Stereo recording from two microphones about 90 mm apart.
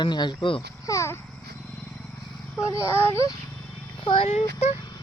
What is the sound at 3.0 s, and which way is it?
Speech, 35° left (ahead or behind).